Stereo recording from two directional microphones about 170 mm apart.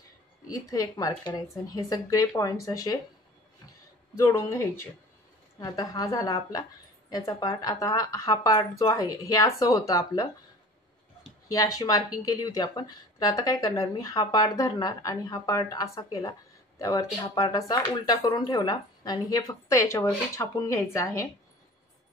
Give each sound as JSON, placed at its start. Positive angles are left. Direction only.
{"t": 0.5, "sound": "speech", "side_deg": 20}
{"t": 4.2, "sound": "speech", "side_deg": 15}
{"t": 11.5, "sound": "speech", "side_deg": 20}